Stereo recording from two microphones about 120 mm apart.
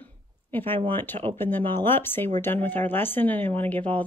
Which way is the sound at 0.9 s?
15° left (ahead or behind).